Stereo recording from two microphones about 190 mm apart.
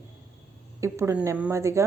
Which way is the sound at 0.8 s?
15° right (ahead or behind).